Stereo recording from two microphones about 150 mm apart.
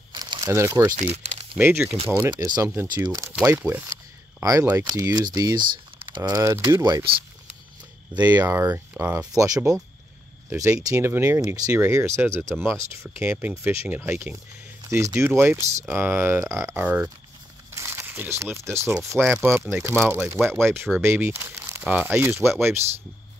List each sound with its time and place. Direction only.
0.1 s crumpling: 30° right (ahead or behind)
0.5 s speech: 15° right (ahead or behind)
0.9 s speech: 45° right (ahead or behind)
1.6 s speech: 15° right (ahead or behind)
8.1 s speech: 10° right (ahead or behind)
9.3 s speech: 25° right (ahead or behind)
17.6 s crumpling: 15° right (ahead or behind)
18.9 s speech: 15° right (ahead or behind)